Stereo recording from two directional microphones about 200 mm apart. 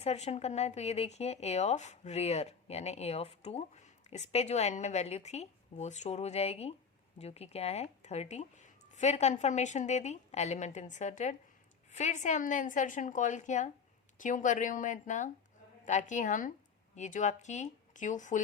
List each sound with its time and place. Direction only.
0.0 s speech: 30° left (ahead or behind)